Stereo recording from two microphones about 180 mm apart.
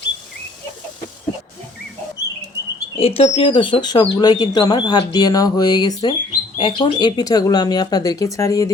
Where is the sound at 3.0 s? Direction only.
35° left (ahead or behind).